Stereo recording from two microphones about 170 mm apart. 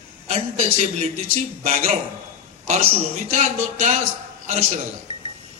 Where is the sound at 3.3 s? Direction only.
45° right (ahead or behind).